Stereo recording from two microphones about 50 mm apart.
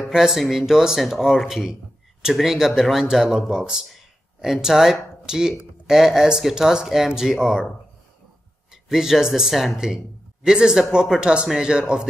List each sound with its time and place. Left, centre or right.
0.1 s speech: centre
8.8 s speech: centre